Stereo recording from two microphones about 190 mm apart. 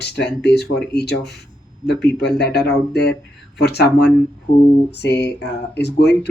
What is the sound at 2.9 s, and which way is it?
Speech, 60° left (ahead or behind).